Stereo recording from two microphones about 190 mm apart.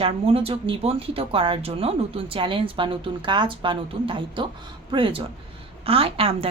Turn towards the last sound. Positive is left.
turn(degrees=-30)  # may be behind; listen again after turning